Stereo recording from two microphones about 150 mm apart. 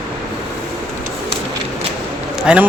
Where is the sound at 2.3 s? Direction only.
5° right (ahead or behind).